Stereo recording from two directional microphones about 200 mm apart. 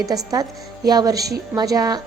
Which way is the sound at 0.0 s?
20° right (ahead or behind).